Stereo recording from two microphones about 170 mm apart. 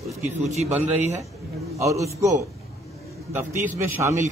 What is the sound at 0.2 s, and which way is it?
A man's voice, 40° right (ahead or behind).